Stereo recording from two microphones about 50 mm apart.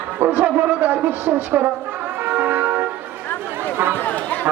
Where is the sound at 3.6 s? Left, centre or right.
Right.